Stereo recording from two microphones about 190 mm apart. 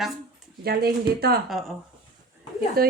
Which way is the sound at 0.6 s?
55° right (ahead or behind).